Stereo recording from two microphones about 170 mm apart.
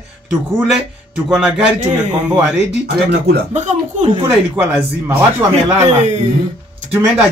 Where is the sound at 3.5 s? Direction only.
45° right (ahead or behind).